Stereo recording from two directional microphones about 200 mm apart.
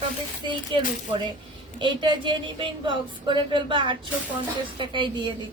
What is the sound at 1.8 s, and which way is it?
A woman's voice, 25° right (ahead or behind).